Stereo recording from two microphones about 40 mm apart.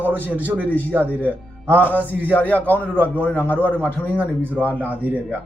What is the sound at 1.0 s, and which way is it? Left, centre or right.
Speech, left.